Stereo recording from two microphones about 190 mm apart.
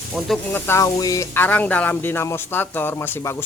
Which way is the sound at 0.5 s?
15° left (ahead or behind).